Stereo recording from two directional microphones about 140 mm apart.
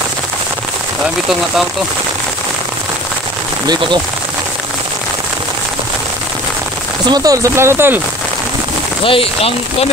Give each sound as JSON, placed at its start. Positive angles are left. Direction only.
{"t": 3.6, "sound": "speech", "side_deg": -30}
{"t": 7.1, "sound": "speech", "side_deg": -25}
{"t": 9.0, "sound": "speech", "side_deg": 40}